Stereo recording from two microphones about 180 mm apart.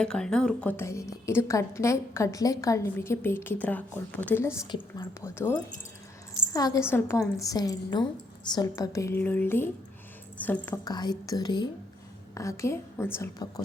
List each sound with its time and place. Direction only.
0.0 s a woman's voice: 5° left (ahead or behind)
4.7 s speech: 25° left (ahead or behind)
5.3 s a woman's voice: 15° left (ahead or behind)
10.8 s a woman's voice: 20° left (ahead or behind)